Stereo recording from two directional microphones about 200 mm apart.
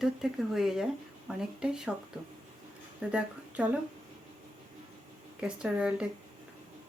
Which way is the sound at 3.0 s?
5° right (ahead or behind).